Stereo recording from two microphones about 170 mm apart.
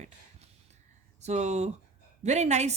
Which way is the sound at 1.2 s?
40° right (ahead or behind).